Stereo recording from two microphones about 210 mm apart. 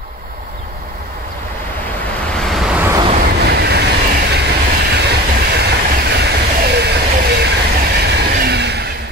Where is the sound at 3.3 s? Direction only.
50° right (ahead or behind).